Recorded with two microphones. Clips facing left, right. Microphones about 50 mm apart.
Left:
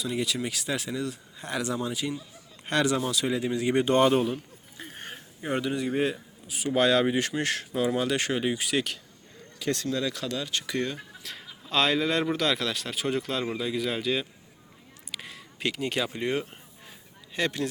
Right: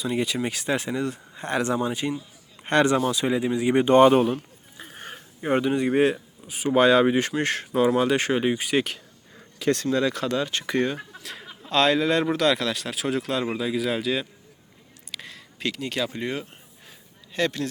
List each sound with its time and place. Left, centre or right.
0.0 s speech: right
3.1 s speech: right
5.5 s speech: right
5.9 s speech: right
6.7 s speech: right
9.6 s speech: right
11.2 s chuckle: centre
11.7 s speech: centre
15.1 s a sound: centre
17.3 s a man's voice: centre